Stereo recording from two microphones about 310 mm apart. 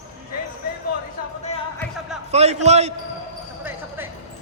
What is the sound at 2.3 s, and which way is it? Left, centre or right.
Speech, right.